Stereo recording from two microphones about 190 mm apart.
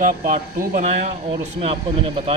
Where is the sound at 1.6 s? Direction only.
30° right (ahead or behind).